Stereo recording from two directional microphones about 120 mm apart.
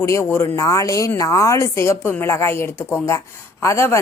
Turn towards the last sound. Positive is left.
turn(degrees=25)  # may be behind; listen again after turning